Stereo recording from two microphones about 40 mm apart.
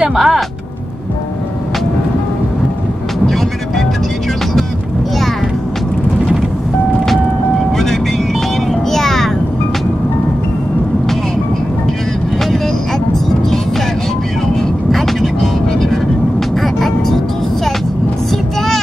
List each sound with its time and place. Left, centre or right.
0.0 s speech: centre
3.3 s music: centre
7.7 s vehicle: centre
14.5 s vehicle: centre